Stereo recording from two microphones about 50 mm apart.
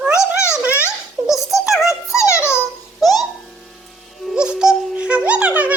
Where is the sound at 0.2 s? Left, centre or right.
Left.